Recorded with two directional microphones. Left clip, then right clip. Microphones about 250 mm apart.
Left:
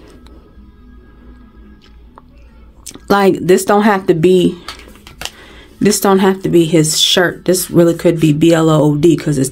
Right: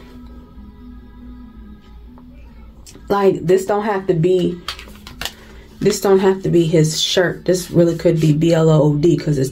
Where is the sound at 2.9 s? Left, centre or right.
Left.